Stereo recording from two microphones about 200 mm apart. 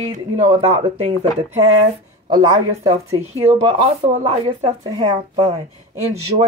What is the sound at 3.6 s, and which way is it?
Speech, 30° right (ahead or behind).